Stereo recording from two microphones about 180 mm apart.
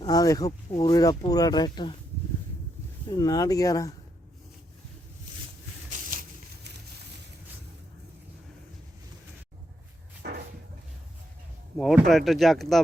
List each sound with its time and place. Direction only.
0.0 s speech: 20° left (ahead or behind)
3.1 s speech: 20° left (ahead or behind)
6.1 s a sound: 50° right (ahead or behind)
10.2 s cupboard open or close: 65° right (ahead or behind)
11.8 s speech: centre (ahead or behind)